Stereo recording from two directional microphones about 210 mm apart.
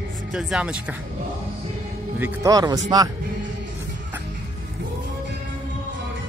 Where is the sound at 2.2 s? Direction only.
15° right (ahead or behind).